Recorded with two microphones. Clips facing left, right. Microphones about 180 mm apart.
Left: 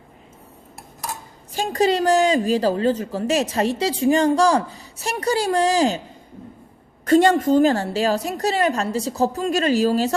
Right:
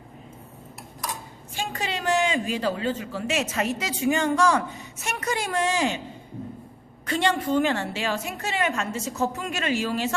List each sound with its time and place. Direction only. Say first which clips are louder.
1.5 s a woman's voice: left 11 dB; 40° left (ahead or behind)
7.0 s a woman's voice: left 9 dB; 45° left (ahead or behind)